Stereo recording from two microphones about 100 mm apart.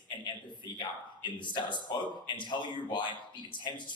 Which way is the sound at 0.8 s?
50° left (ahead or behind).